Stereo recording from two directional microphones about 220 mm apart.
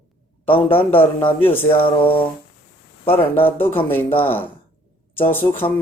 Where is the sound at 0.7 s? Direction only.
10° left (ahead or behind).